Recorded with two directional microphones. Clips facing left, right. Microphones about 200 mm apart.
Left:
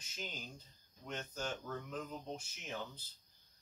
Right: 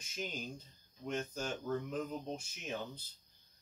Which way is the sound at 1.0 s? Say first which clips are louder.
Right 4 dB; 15° right (ahead or behind).